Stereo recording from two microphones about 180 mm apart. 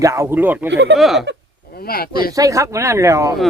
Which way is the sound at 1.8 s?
55° left (ahead or behind).